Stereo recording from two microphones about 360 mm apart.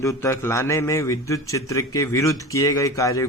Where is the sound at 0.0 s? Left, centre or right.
Centre.